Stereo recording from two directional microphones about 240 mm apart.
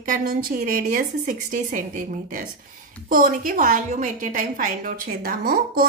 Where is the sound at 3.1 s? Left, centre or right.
Right.